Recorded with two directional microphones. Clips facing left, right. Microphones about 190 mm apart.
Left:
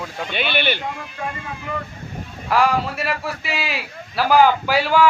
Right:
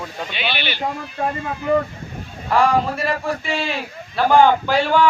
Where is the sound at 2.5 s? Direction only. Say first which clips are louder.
Right 2 dB; centre (ahead or behind).